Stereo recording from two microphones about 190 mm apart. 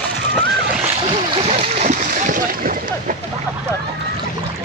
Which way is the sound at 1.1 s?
30° right (ahead or behind).